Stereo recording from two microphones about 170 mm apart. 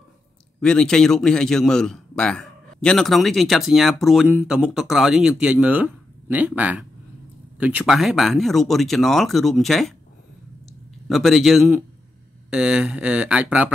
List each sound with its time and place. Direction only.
0.6 s a man's voice: 5° left (ahead or behind)
11.1 s a man's voice: centre (ahead or behind)